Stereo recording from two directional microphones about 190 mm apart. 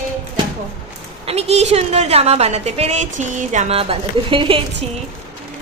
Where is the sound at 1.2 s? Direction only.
35° right (ahead or behind).